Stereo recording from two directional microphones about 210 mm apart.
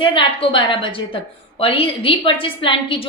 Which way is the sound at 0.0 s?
25° left (ahead or behind).